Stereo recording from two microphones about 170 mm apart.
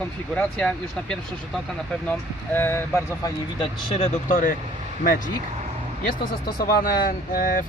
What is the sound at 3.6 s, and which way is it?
Speech, 35° left (ahead or behind).